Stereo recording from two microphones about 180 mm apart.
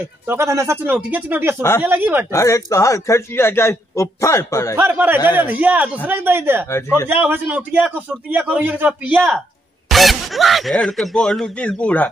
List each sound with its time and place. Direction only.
0.3 s a man's voice: 15° right (ahead or behind)
2.3 s speech: 15° left (ahead or behind)
4.7 s a man's voice: 10° right (ahead or behind); by 12.1 s 5° left (ahead or behind)